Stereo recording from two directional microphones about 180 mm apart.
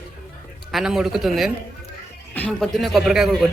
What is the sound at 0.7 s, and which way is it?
Speech, centre (ahead or behind).